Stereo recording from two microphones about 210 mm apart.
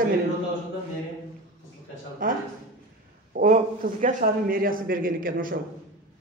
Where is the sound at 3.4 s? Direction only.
35° right (ahead or behind).